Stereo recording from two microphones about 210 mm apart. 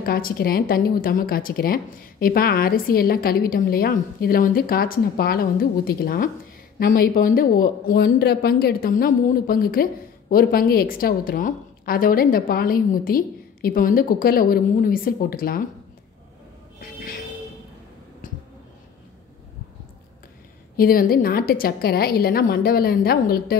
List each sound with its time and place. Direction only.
0.0 s speech: 45° left (ahead or behind)
18.2 s a sound: 40° left (ahead or behind)
20.7 s speech: 45° left (ahead or behind)